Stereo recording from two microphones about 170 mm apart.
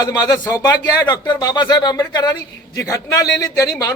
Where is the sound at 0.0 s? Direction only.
20° left (ahead or behind).